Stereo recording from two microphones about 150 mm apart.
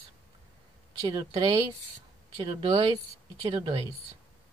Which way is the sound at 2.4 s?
35° right (ahead or behind).